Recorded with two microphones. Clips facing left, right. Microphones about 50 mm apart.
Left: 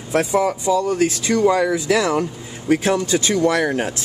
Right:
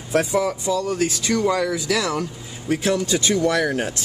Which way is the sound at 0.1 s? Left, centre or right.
Left.